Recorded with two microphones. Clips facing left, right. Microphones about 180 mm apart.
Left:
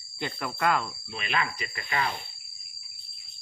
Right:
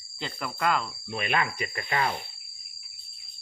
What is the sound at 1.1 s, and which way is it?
Speech, 50° right (ahead or behind).